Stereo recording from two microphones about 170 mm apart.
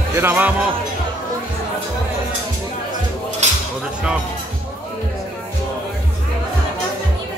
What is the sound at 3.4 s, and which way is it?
Dishes, 40° right (ahead or behind).